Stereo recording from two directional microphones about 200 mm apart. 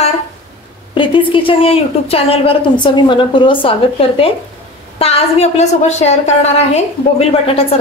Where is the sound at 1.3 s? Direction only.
25° left (ahead or behind).